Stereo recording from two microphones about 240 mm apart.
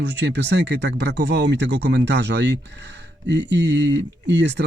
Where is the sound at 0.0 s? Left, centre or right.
Right.